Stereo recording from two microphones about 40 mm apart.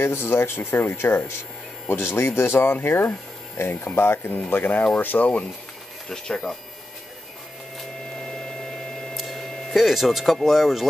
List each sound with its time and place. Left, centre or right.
0.0 s speech: left
1.9 s speech: left
4.5 s speech: left
6.0 s speech: centre
8.2 s a sound: centre
9.1 s speech: centre